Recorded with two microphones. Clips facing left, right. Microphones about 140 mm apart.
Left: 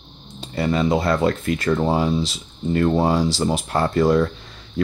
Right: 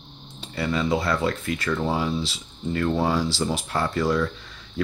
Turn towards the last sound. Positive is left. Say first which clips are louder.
# left 6 dB
turn(degrees=45)  # may be behind; listen again after turning